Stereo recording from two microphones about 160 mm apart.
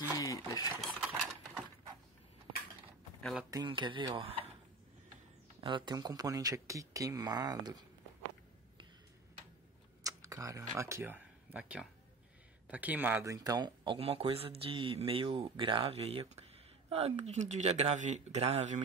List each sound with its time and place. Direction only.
0.2 s a sound: 25° left (ahead or behind)
0.7 s a sound: centre (ahead or behind)
3.2 s speech: centre (ahead or behind)
3.4 s speech: 25° right (ahead or behind)
5.6 s speech: 30° right (ahead or behind)
10.0 s speech: 20° right (ahead or behind); by 18.8 s 40° right (ahead or behind)